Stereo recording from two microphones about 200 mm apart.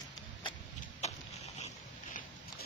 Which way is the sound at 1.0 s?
35° left (ahead or behind).